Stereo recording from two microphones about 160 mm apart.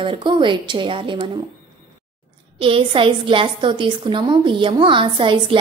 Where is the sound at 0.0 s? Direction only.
30° right (ahead or behind).